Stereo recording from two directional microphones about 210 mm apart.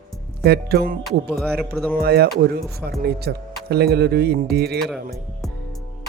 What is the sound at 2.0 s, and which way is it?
Speech, 50° right (ahead or behind).